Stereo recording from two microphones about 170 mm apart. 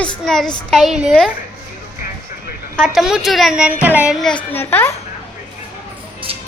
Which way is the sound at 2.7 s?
Centre (ahead or behind).